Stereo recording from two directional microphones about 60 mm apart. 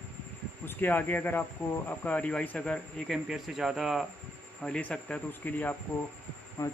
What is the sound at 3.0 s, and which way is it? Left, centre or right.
Speech, centre.